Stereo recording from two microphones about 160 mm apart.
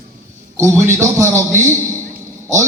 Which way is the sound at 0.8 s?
15° right (ahead or behind).